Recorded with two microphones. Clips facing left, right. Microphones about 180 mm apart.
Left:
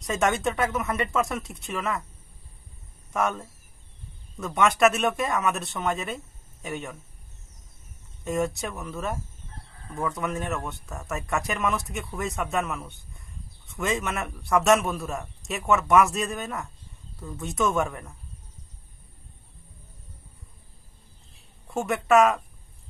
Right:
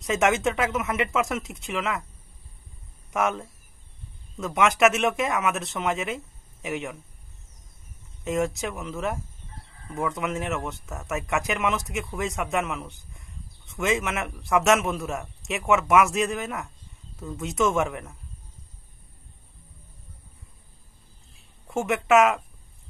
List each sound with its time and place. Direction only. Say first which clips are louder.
0.0 s a man's voice: right 2 dB; centre (ahead or behind)
3.2 s a man's voice: right 1 dB; centre (ahead or behind)
8.3 s a man's voice: right 1 dB; centre (ahead or behind)
21.6 s a man's voice: right 1 dB; centre (ahead or behind)